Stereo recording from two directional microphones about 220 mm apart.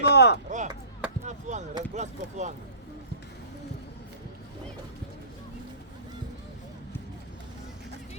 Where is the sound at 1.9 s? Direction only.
30° right (ahead or behind).